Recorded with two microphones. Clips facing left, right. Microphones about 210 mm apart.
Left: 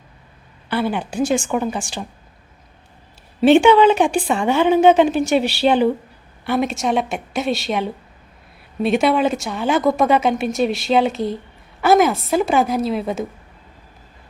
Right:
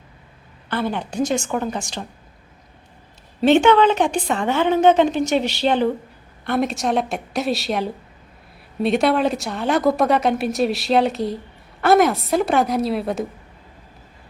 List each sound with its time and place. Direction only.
0.7 s a woman's voice: 10° left (ahead or behind)
3.4 s a woman's voice: 10° left (ahead or behind)